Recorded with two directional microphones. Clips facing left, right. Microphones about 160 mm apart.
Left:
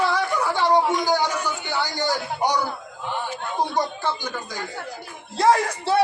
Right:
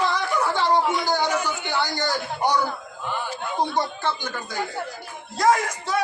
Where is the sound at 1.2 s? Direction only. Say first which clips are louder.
Right 1 dB; 10° right (ahead or behind).